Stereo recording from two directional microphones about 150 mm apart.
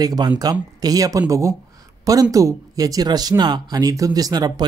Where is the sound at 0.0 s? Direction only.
25° right (ahead or behind).